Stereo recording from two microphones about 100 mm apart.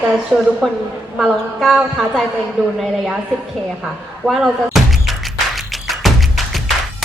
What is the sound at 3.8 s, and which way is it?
Speech, 5° right (ahead or behind).